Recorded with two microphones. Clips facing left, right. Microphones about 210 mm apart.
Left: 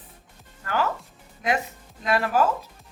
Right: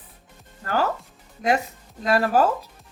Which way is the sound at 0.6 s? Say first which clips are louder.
Right 2 dB; 40° right (ahead or behind).